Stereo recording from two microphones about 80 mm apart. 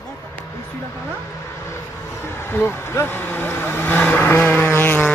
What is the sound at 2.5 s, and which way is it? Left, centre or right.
Speech, left.